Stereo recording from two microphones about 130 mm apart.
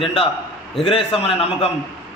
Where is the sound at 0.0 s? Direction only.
45° left (ahead or behind).